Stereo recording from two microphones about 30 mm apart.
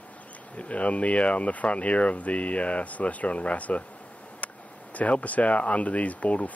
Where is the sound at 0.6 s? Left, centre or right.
Left.